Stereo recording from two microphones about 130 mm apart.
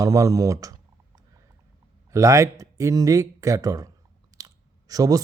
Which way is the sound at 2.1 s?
25° right (ahead or behind).